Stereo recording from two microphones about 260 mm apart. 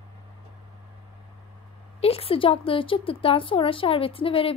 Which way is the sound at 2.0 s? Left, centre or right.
Left.